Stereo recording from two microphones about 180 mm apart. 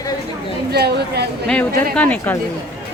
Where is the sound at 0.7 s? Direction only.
65° right (ahead or behind).